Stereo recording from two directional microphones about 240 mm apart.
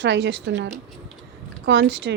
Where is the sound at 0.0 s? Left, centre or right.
Right.